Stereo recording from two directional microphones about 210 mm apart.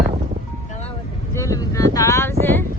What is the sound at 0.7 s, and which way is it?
Vehicle, 30° left (ahead or behind).